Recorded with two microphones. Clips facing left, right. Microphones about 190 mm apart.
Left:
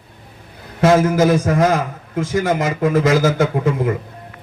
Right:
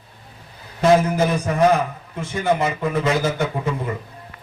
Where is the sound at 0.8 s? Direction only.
90° left.